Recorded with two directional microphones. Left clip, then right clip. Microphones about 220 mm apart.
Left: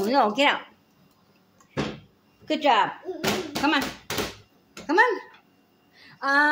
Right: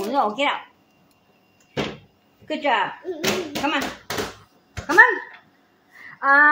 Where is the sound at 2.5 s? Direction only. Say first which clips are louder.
Left 1 dB; 15° left (ahead or behind).